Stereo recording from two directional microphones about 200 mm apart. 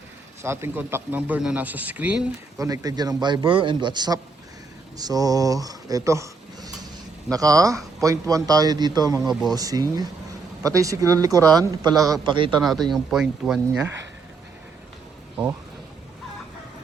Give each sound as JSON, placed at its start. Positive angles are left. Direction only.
{"t": 0.4, "sound": "a man's voice", "side_deg": -10}
{"t": 2.6, "sound": "a man's voice", "side_deg": -15}
{"t": 12.6, "sound": "speech", "side_deg": 0}